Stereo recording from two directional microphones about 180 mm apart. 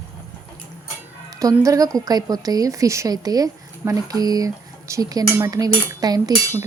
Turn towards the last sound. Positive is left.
turn(degrees=-20)  # may be behind; listen again after turning